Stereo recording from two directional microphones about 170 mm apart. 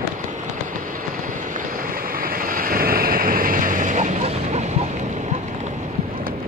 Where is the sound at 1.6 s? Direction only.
55° right (ahead or behind).